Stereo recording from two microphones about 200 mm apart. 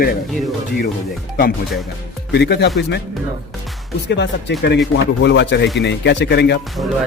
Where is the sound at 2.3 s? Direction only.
55° left (ahead or behind).